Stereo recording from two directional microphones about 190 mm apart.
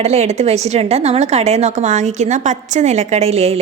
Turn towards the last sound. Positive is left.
turn(degrees=-35)  # may be behind; listen again after turning